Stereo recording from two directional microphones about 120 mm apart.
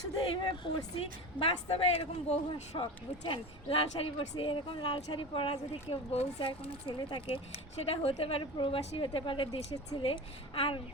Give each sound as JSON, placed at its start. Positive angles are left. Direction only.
{"t": 0.4, "sound": "speech", "side_deg": 40}
{"t": 2.5, "sound": "speech", "side_deg": 40}